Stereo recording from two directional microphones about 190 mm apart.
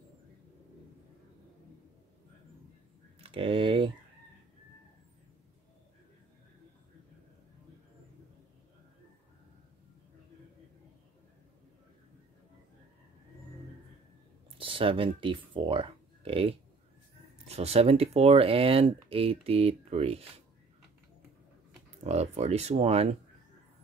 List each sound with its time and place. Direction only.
3.2 s a sound: 30° right (ahead or behind)
14.6 s speech: 25° right (ahead or behind)
22.0 s speech: 35° right (ahead or behind)